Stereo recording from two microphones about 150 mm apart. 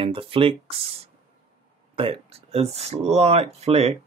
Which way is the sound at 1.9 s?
40° right (ahead or behind).